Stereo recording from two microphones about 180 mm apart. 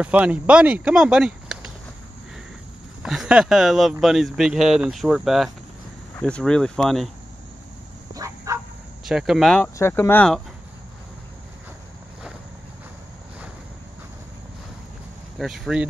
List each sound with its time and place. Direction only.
0.0 s speech: 5° right (ahead or behind)
3.0 s speech: 5° right (ahead or behind)
8.1 s dog: 20° right (ahead or behind)
9.0 s speech: centre (ahead or behind)
9.8 s speech: 15° left (ahead or behind)
15.3 s speech: centre (ahead or behind)